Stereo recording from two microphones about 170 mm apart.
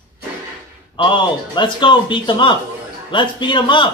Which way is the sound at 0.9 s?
30° left (ahead or behind).